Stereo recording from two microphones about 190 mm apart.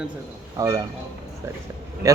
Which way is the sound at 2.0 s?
15° right (ahead or behind).